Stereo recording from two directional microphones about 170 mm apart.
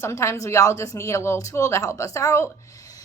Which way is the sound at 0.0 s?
15° left (ahead or behind).